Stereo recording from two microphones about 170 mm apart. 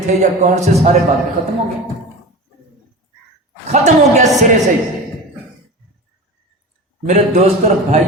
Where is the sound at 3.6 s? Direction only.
40° right (ahead or behind).